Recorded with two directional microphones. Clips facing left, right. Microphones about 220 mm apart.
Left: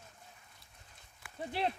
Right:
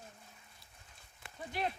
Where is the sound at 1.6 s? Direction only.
30° left (ahead or behind).